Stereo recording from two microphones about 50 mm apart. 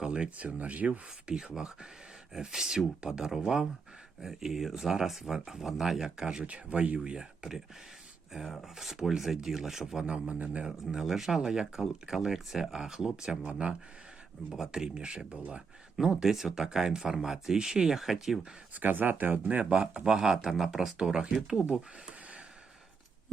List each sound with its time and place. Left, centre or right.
0.0 s speech: centre
0.3 s speech: right
1.5 s speech: centre
10.3 s a man's voice: right
10.7 s speech: centre; by 15.6 s right
16.0 s speech: centre
18.7 s speech: right; by 21.3 s centre